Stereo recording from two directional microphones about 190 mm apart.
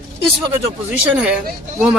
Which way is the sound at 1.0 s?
5° right (ahead or behind).